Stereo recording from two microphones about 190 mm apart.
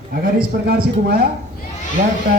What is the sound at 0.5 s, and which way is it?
Speech, 50° right (ahead or behind).